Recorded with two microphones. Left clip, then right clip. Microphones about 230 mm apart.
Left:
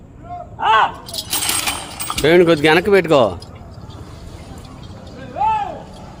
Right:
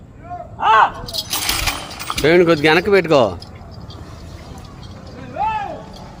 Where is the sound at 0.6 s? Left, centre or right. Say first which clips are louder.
Right 2 dB; centre.